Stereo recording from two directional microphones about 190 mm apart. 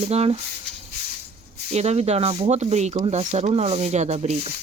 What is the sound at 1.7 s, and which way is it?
Speech, 35° right (ahead or behind).